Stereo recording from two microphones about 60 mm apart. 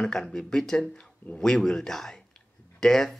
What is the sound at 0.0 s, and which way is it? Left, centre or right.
Speech, centre.